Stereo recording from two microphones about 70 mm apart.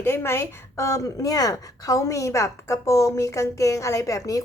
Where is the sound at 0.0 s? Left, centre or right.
Left.